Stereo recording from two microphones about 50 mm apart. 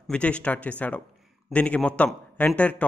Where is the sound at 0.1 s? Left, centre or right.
Left.